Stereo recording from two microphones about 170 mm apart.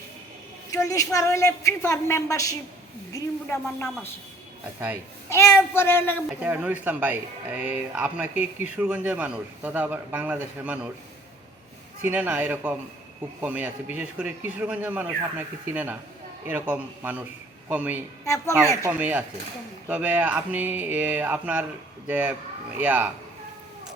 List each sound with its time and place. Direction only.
0.7 s a woman's voice: 20° left (ahead or behind)
5.3 s a woman's voice: 15° left (ahead or behind)
6.4 s speech: 10° right (ahead or behind)
12.0 s speech: 10° right (ahead or behind)